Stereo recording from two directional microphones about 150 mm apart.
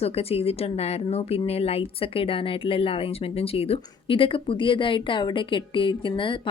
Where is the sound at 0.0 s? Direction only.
40° left (ahead or behind).